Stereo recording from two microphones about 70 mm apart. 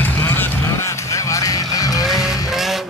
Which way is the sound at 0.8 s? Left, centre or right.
Left.